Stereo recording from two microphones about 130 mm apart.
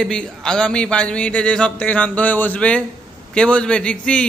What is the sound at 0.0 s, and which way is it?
Speech, 5° left (ahead or behind).